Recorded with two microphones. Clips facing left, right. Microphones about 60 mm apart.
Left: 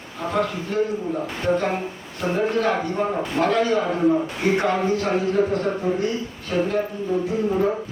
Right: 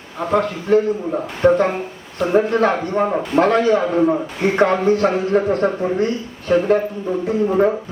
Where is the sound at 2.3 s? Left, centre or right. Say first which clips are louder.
Right 6 dB; right.